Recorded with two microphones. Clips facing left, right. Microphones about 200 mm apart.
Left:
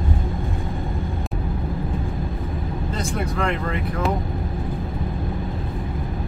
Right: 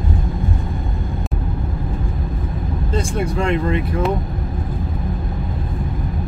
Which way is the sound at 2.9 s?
25° right (ahead or behind).